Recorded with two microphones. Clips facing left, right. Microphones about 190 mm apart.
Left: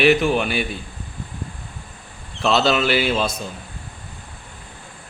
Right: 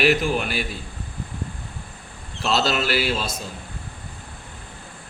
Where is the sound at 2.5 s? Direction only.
Centre (ahead or behind).